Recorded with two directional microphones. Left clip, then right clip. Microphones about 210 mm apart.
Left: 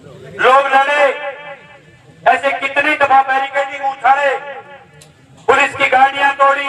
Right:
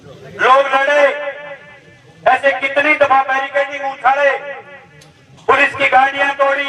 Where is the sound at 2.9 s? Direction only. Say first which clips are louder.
Left 1 dB; 15° left (ahead or behind).